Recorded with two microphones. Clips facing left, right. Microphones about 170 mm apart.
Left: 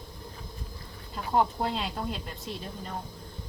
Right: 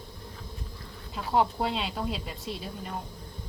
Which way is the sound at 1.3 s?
Centre (ahead or behind).